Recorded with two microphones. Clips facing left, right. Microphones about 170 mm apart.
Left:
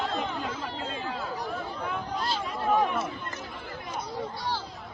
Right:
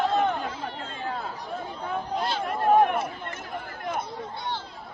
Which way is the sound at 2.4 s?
55° right (ahead or behind).